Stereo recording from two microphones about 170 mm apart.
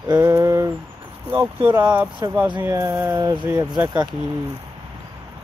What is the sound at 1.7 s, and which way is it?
Speech, 10° right (ahead or behind).